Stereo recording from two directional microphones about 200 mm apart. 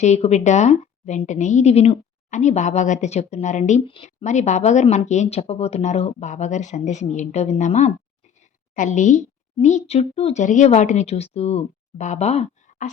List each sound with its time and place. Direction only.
0.0 s a woman's voice: 35° left (ahead or behind)